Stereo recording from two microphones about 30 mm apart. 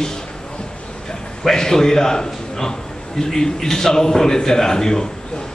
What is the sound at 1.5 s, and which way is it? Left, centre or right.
A man's voice, centre.